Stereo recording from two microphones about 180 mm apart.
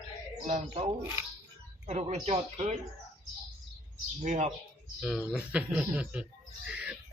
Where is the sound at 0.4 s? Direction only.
30° right (ahead or behind).